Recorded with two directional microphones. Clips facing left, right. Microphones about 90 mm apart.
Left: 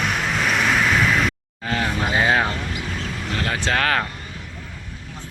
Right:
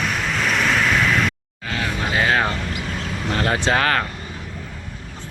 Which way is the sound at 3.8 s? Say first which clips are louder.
Left 2 dB; centre (ahead or behind).